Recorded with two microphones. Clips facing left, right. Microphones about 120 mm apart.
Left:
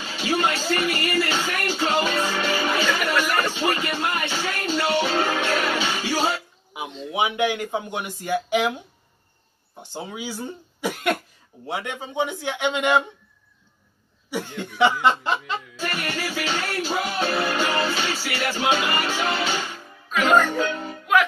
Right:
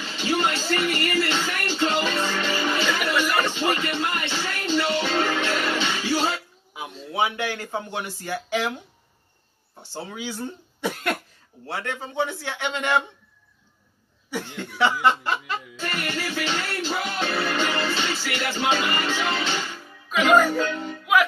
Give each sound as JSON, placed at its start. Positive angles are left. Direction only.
{"t": 0.0, "sound": "music", "side_deg": 5}
{"t": 7.1, "sound": "speech", "side_deg": 15}
{"t": 11.6, "sound": "speech", "side_deg": 15}
{"t": 14.6, "sound": "speech", "side_deg": 20}
{"t": 15.9, "sound": "speech", "side_deg": 5}
{"t": 17.2, "sound": "speech", "side_deg": 25}
{"t": 17.5, "sound": "music", "side_deg": 10}
{"t": 18.9, "sound": "speech", "side_deg": 10}
{"t": 19.4, "sound": "music", "side_deg": 10}
{"t": 20.1, "sound": "speech", "side_deg": -5}
{"t": 20.8, "sound": "music", "side_deg": 5}